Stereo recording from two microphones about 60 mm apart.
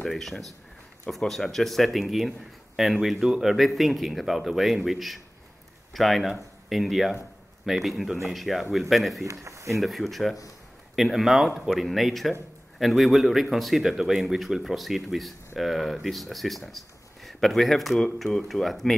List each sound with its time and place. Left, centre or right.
0.0 s a man's voice: centre
9.2 s speech: right
9.8 s a man's voice: centre